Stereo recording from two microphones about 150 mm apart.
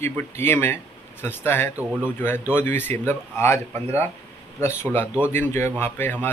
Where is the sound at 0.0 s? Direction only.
15° left (ahead or behind).